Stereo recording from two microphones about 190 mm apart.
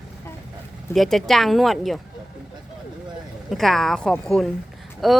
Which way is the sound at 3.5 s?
Centre (ahead or behind).